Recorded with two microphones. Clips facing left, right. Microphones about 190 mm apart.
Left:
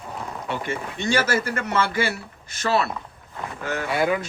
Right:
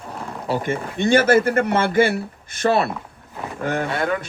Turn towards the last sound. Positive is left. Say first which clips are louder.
# left 1 dB
turn(degrees=5)  # may be behind; listen again after turning